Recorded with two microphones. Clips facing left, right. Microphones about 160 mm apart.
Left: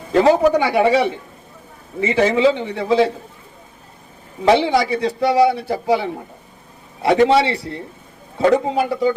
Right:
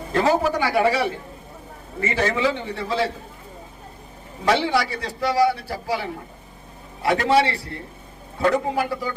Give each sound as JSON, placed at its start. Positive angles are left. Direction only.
{"t": 0.1, "sound": "a man's voice", "side_deg": 20}
{"t": 4.4, "sound": "a man's voice", "side_deg": 20}